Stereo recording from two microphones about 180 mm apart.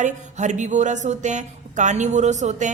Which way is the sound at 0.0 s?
40° right (ahead or behind).